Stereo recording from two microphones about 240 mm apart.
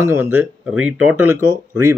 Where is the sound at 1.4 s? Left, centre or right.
Right.